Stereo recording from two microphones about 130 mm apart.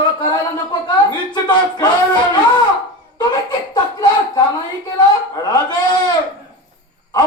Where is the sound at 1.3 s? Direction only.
35° left (ahead or behind).